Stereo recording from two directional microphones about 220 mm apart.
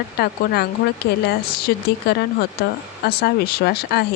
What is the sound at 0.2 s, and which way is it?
Speech, 45° left (ahead or behind).